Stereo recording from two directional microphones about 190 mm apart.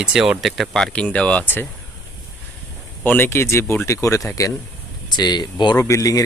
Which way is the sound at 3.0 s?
10° left (ahead or behind).